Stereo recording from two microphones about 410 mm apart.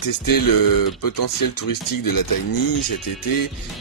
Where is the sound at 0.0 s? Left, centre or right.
Left.